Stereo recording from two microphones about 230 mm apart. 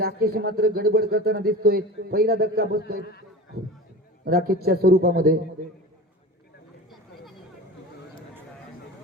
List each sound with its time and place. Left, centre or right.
0.0 s a man's voice: right
3.0 s a man's voice: left
4.3 s a man's voice: right